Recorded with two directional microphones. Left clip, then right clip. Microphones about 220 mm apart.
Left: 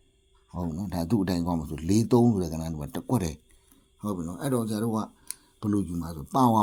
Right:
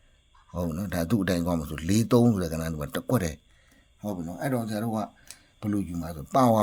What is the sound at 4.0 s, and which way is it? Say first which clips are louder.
A man's voice: right 1 dB; 5° left (ahead or behind).